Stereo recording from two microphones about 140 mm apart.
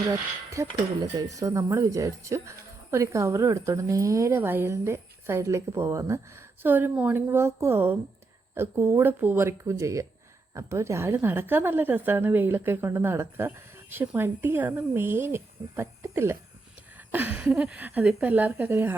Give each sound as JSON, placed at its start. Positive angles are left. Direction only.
{"t": 0.1, "sound": "a woman's voice", "side_deg": -20}